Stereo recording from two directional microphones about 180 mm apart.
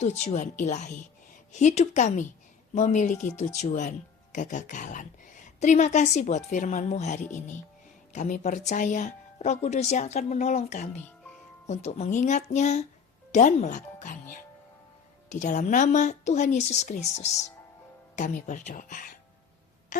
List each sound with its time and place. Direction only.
0.0 s speech: 40° left (ahead or behind)